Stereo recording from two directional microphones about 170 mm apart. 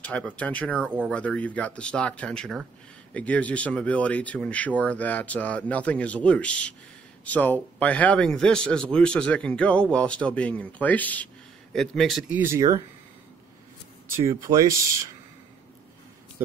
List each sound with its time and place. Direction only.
0.0 s a man's voice: 10° left (ahead or behind)
12.4 s speech: 15° right (ahead or behind)
14.0 s speech: 15° right (ahead or behind)